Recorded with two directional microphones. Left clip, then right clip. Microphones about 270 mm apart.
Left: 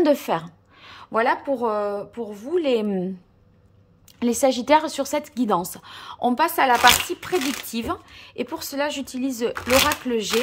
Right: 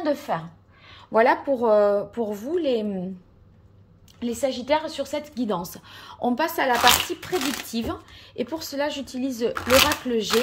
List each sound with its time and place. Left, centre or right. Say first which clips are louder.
0.0 s a woman's voice: left 5 dB; left
1.1 s a woman's voice: right 2 dB; centre
4.2 s a woman's voice: left 6 dB; centre